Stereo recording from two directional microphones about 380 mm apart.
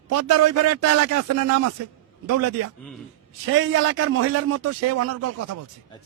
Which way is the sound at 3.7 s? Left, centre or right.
Right.